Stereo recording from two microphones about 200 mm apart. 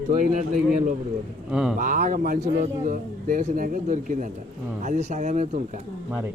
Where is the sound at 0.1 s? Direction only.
40° right (ahead or behind).